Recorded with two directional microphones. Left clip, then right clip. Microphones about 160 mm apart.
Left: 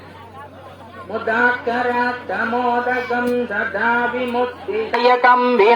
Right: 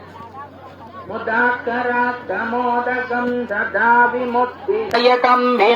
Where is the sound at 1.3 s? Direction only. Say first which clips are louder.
Even; 20° left (ahead or behind).